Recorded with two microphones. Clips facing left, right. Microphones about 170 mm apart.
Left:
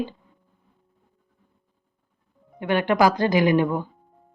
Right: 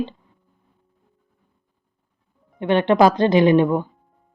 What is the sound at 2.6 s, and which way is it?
A woman's voice, 25° right (ahead or behind).